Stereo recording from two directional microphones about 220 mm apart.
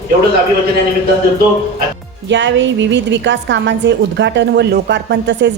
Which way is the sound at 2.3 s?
55° right (ahead or behind).